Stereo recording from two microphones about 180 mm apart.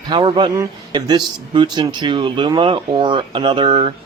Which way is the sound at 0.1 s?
25° right (ahead or behind).